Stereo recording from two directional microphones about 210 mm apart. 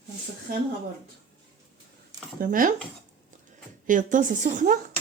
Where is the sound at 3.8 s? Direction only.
40° right (ahead or behind).